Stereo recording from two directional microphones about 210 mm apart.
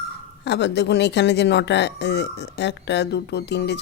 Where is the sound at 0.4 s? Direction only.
55° left (ahead or behind).